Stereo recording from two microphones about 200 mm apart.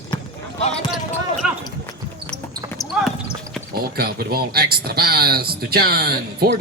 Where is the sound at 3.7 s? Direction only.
50° right (ahead or behind).